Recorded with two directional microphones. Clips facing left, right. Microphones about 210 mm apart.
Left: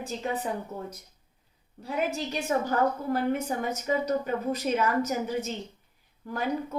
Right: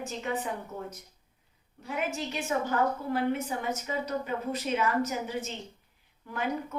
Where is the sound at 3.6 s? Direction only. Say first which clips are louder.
Left 4 dB; 40° left (ahead or behind).